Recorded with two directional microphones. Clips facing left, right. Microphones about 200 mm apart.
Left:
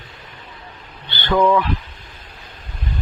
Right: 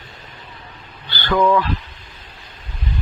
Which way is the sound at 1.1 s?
25° left (ahead or behind).